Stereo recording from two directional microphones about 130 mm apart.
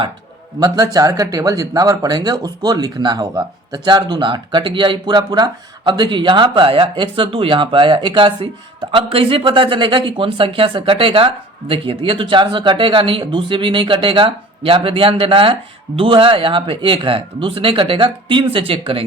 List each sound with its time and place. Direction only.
0.6 s speech: 30° right (ahead or behind)